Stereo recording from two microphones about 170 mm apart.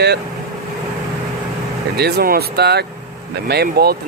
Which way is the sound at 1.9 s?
65° right (ahead or behind).